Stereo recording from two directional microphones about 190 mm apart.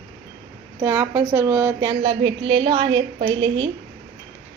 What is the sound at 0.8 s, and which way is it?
A woman's voice, 10° right (ahead or behind).